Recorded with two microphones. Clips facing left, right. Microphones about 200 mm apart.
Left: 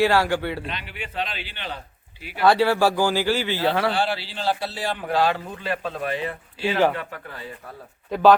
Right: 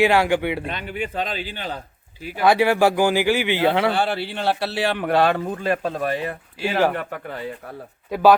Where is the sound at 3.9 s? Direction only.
55° right (ahead or behind).